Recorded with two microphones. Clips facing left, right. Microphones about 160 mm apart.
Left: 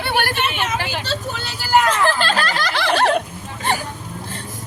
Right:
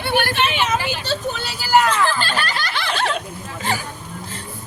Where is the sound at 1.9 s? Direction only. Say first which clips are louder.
Left 2 dB; 90° left; by 3.2 s 60° left (ahead or behind).